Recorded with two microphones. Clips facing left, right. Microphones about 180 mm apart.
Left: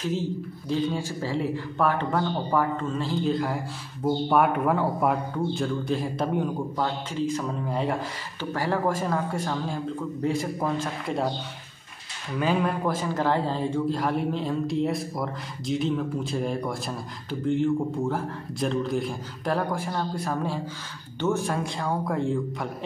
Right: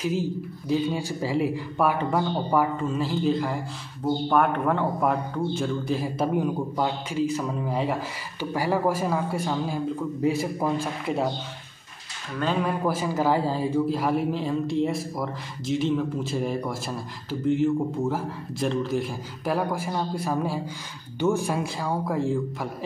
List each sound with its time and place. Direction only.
0.0 s speech: 10° right (ahead or behind)
12.4 s speech: 5° left (ahead or behind)
12.8 s speech: 10° right (ahead or behind)